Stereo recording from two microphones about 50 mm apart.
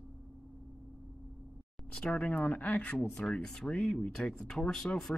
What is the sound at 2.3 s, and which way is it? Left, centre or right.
Speech, centre.